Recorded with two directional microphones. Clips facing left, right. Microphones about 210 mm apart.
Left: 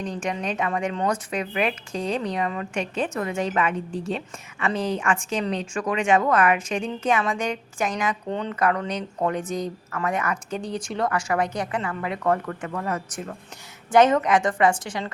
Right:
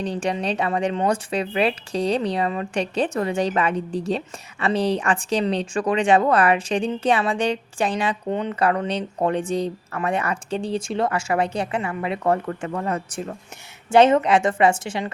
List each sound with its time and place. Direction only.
0.0 s speech: 35° right (ahead or behind)
8.3 s a woman's voice: 20° right (ahead or behind)
8.5 s a woman's voice: 30° right (ahead or behind)